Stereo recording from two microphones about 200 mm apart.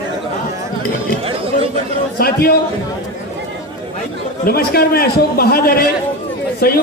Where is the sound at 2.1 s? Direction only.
50° left (ahead or behind).